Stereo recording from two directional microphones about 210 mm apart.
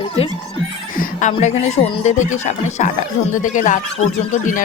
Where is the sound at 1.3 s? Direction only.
35° left (ahead or behind).